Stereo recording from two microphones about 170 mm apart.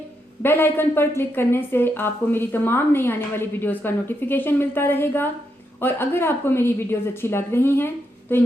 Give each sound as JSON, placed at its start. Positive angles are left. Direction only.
{"t": 0.4, "sound": "a woman's voice", "side_deg": 15}